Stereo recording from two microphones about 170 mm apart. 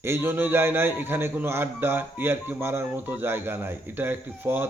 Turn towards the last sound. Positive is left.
turn(degrees=-10)  # may be behind; listen again after turning